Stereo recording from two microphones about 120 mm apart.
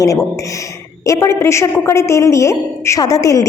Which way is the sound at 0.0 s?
25° left (ahead or behind).